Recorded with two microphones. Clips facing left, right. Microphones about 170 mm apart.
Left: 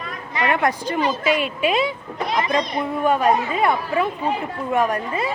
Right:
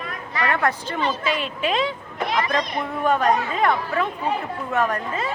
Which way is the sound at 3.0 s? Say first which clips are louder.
Left 1 dB; 10° left (ahead or behind).